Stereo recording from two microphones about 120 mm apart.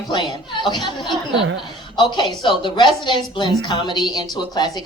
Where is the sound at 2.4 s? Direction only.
40° left (ahead or behind).